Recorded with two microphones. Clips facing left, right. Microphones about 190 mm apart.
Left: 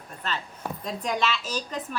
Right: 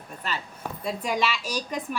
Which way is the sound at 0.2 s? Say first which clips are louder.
Left 1 dB; 10° right (ahead or behind).